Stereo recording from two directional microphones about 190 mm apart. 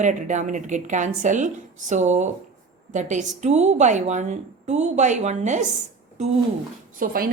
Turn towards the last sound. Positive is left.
turn(degrees=-50)  # may be behind; listen again after turning